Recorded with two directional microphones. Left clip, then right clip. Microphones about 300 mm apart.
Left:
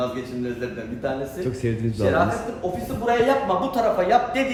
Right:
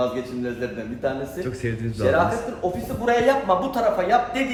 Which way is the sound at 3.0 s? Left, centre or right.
Centre.